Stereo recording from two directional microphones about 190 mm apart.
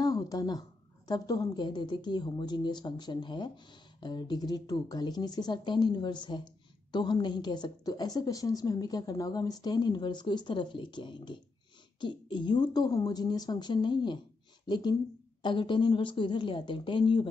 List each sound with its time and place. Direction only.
0.0 s a woman's voice: 20° left (ahead or behind)